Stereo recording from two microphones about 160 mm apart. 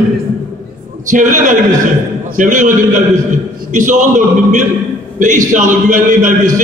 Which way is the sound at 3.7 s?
55° right (ahead or behind).